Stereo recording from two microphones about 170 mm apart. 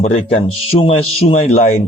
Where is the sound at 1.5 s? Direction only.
50° left (ahead or behind).